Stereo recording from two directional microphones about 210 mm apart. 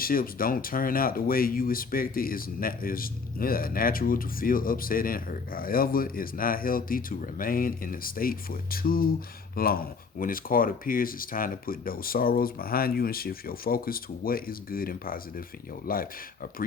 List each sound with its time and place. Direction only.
0.0 s speech: 45° left (ahead or behind)